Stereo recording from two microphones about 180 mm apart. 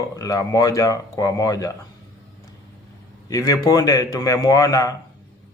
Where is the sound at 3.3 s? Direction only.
20° left (ahead or behind).